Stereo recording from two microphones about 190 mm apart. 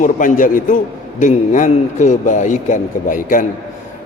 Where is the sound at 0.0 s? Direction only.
45° left (ahead or behind).